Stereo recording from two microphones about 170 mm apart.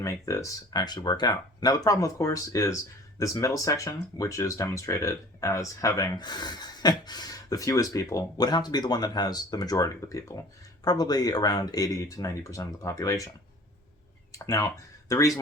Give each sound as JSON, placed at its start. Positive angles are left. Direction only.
{"t": 0.0, "sound": "speech", "side_deg": 20}
{"t": 14.3, "sound": "speech", "side_deg": 20}